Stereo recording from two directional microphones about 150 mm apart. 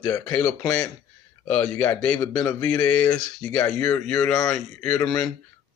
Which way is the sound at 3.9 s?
5° left (ahead or behind).